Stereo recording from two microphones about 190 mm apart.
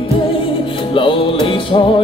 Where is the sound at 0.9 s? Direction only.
25° left (ahead or behind).